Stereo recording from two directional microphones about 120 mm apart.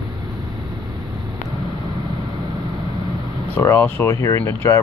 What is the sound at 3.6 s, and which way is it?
Speech, 20° left (ahead or behind).